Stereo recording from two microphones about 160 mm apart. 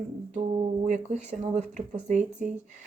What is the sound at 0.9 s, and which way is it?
Speech, 45° right (ahead or behind).